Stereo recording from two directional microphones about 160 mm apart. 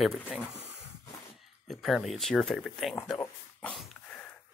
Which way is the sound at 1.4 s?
Centre (ahead or behind).